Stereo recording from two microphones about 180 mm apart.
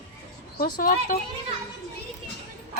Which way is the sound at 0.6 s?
50° left (ahead or behind).